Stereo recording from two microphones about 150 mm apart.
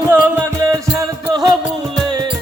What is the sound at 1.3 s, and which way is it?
Music, 30° right (ahead or behind).